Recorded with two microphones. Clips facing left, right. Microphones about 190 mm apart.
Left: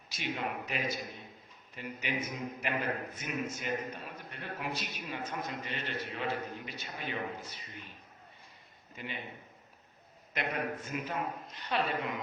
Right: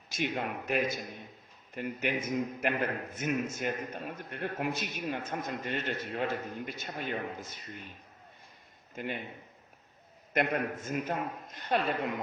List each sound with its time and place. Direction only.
0.1 s a man's voice: 50° right (ahead or behind)
9.0 s a man's voice: 50° right (ahead or behind)
10.3 s a man's voice: 50° right (ahead or behind)